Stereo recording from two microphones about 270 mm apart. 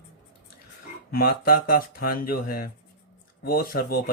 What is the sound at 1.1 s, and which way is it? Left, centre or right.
Speech, left.